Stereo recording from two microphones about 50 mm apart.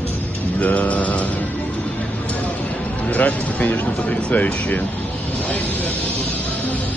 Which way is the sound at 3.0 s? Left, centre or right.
Left.